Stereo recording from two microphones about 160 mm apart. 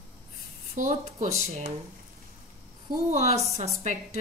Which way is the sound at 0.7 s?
50° right (ahead or behind).